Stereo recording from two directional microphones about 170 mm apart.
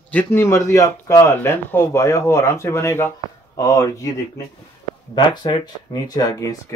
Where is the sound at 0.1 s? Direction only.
10° left (ahead or behind).